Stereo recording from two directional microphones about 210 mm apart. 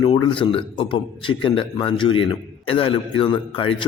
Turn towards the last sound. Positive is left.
turn(degrees=25)  # may be behind; listen again after turning